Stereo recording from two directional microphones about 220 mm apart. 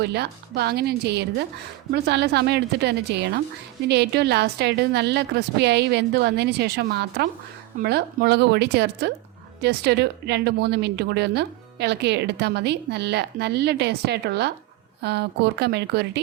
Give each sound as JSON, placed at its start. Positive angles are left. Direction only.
{"t": 0.0, "sound": "speech", "side_deg": -50}